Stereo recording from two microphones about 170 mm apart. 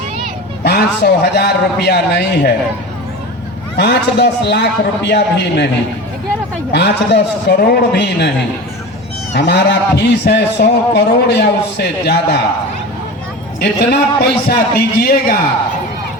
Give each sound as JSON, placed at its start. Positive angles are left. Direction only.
{"t": 0.6, "sound": "a man's voice", "side_deg": 70}
{"t": 3.8, "sound": "a man's voice", "side_deg": 80}
{"t": 6.7, "sound": "a man's voice", "side_deg": 90}
{"t": 9.3, "sound": "a sound", "side_deg": 85}
{"t": 10.0, "sound": "a man's voice", "side_deg": 85}
{"t": 13.6, "sound": "a man's voice", "side_deg": 70}